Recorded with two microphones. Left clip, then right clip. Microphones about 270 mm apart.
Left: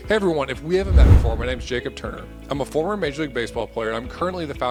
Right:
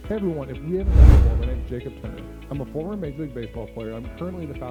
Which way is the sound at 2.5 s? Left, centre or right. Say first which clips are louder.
Left 8 dB; left.